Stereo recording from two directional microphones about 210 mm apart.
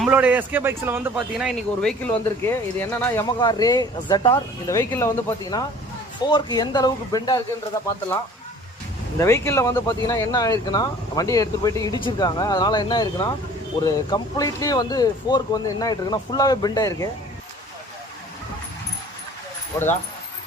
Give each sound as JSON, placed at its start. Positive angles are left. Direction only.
{"t": 0.0, "sound": "speech", "side_deg": -5}
{"t": 2.4, "sound": "speech", "side_deg": 10}
{"t": 9.2, "sound": "speech", "side_deg": 15}
{"t": 19.7, "sound": "speech", "side_deg": 15}